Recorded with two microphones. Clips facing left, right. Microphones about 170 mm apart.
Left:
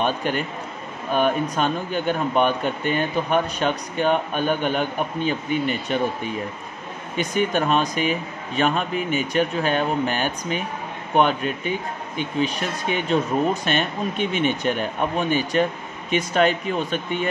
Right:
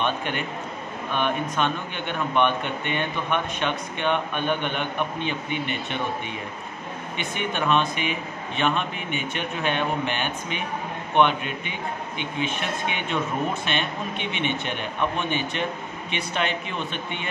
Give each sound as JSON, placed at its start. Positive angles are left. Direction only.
{"t": 0.0, "sound": "speech", "side_deg": 40}